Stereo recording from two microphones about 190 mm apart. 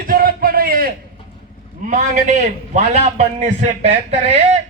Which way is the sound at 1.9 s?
40° right (ahead or behind).